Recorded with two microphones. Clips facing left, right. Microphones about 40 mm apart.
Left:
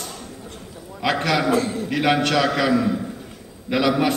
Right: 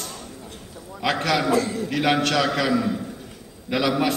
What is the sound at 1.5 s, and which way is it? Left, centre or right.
Speech, left.